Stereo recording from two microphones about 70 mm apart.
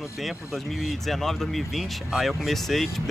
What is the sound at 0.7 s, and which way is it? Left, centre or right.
Speech, centre.